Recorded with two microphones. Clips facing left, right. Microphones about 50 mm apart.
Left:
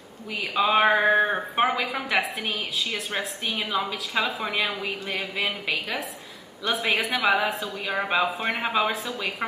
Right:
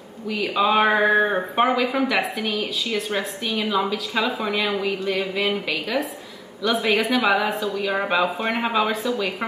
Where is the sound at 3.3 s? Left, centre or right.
Centre.